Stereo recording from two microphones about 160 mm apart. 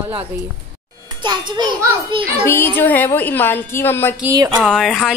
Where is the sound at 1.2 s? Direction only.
30° right (ahead or behind).